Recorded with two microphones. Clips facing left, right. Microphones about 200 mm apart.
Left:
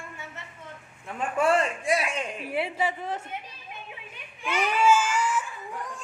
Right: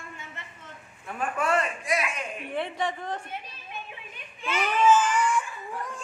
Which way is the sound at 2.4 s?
5° left (ahead or behind).